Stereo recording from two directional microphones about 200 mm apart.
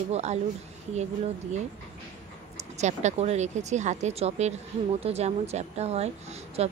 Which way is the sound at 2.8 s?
35° right (ahead or behind).